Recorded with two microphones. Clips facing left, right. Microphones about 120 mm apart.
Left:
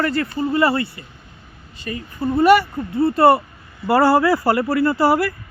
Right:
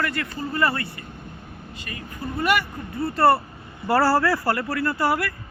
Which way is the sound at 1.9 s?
30° left (ahead or behind).